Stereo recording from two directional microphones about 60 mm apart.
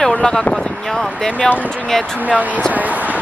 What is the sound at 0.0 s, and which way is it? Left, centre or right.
Speech, centre.